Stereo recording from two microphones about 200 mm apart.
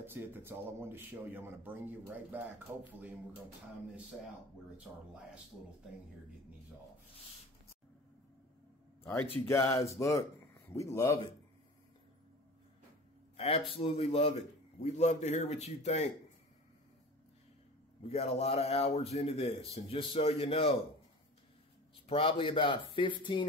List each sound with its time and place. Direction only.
0.0 s speech: 10° right (ahead or behind)
4.7 s speech: 5° right (ahead or behind)
9.0 s speech: 10° left (ahead or behind)
13.4 s a man's voice: 30° left (ahead or behind)
18.0 s speech: 30° left (ahead or behind)
22.0 s speech: 25° left (ahead or behind)